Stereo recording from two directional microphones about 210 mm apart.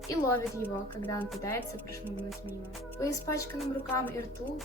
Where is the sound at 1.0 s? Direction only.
10° left (ahead or behind).